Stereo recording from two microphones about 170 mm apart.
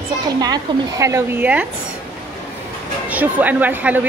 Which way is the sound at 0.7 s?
30° right (ahead or behind).